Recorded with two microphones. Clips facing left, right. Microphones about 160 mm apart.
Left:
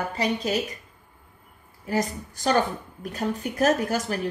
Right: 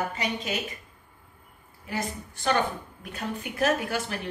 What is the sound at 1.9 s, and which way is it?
A woman's voice, 40° left (ahead or behind).